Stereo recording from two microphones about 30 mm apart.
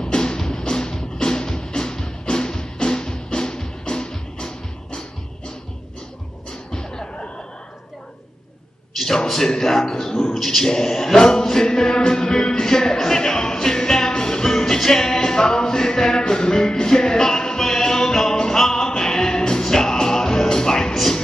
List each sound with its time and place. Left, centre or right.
0.0 s music: left
6.5 s music: left
8.9 s a sound: centre
9.4 s a man's voice: centre
10.7 s music: centre